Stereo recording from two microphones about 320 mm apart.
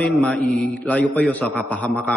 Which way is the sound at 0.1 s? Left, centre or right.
Centre.